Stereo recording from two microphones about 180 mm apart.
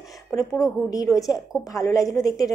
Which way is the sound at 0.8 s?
20° left (ahead or behind).